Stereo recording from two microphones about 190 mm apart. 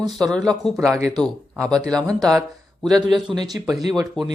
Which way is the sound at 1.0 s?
15° right (ahead or behind).